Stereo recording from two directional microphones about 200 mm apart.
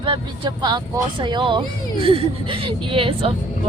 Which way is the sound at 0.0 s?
25° right (ahead or behind).